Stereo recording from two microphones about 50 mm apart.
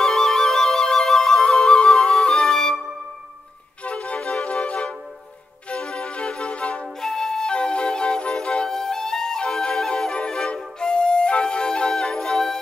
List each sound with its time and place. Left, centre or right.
0.0 s music: centre
2.4 s flute: centre
3.8 s flute: left
5.7 s music: centre
6.8 s music: centre
8.6 s flute: centre